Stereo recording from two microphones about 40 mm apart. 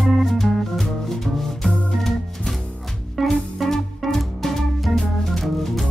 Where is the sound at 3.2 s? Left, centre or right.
Centre.